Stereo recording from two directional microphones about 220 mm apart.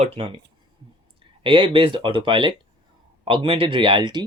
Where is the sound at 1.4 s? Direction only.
25° right (ahead or behind).